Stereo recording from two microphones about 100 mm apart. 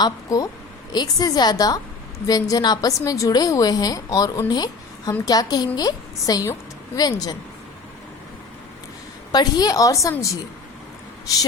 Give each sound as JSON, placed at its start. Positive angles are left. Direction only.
{"t": 0.0, "sound": "a woman's voice", "side_deg": 35}
{"t": 9.3, "sound": "a woman's voice", "side_deg": 40}